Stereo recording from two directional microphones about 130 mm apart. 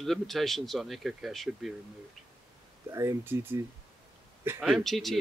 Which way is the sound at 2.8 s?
20° right (ahead or behind).